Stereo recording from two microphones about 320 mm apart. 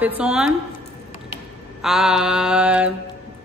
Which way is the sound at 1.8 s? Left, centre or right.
Centre.